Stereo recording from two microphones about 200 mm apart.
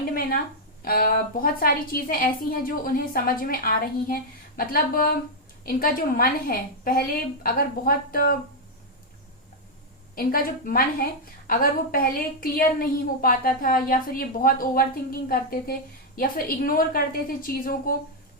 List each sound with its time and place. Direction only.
0.1 s a sound: 45° left (ahead or behind)
0.9 s a woman's voice: 45° left (ahead or behind)
10.2 s a woman's voice: 45° left (ahead or behind)